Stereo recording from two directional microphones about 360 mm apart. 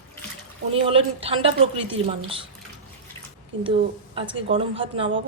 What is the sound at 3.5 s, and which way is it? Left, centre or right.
Speech, right.